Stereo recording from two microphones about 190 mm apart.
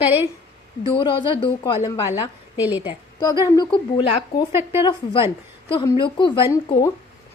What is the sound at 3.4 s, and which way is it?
A woman's voice, 20° left (ahead or behind).